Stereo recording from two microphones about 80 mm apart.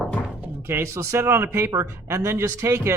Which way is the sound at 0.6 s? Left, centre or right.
Right.